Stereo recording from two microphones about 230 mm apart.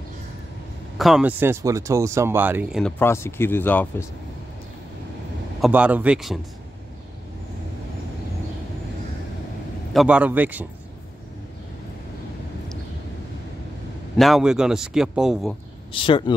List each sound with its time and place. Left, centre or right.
0.9 s speech: centre
2.8 s speech: centre
5.6 s a man's voice: centre
9.9 s speech: centre
14.1 s a man's voice: centre
15.9 s speech: left